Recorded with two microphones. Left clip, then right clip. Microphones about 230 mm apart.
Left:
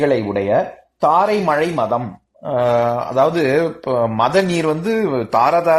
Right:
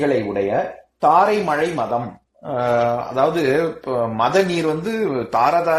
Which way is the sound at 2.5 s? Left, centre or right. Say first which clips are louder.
Left 2 dB; left.